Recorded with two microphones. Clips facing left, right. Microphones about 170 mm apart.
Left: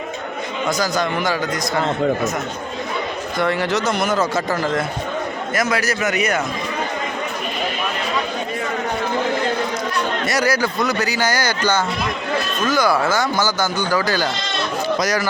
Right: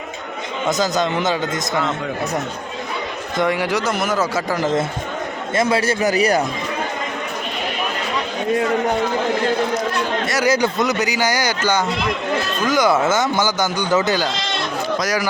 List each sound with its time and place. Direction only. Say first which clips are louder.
0.7 s speech: right 2 dB; 20° right (ahead or behind)
3.3 s a man's voice: right 1 dB; 15° right (ahead or behind); by 6.4 s 35° right (ahead or behind)
10.4 s a man's voice: right 4 dB; 20° right (ahead or behind)
12.6 s speech: right 2 dB; 20° right (ahead or behind)